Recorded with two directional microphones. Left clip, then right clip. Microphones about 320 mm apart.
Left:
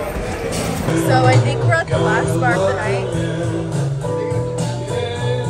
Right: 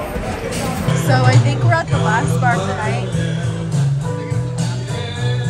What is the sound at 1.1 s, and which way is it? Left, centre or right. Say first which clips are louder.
Speech: left 2 dB; centre.